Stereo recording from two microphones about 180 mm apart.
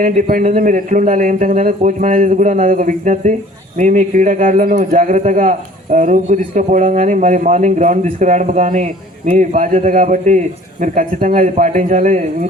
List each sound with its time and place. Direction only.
0.0 s a man's voice: 45° right (ahead or behind)